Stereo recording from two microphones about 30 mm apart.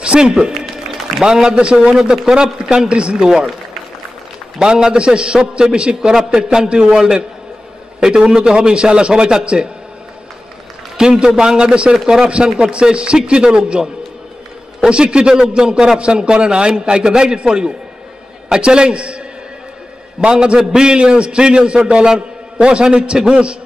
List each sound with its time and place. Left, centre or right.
0.0 s music: right
1.2 s a man's voice: right
2.9 s a man's voice: right
3.2 s a man's voice: right
4.6 s a man's voice: right
8.4 s a man's voice: right
11.0 s a man's voice: right
12.7 s a man's voice: right
14.9 s a man's voice: right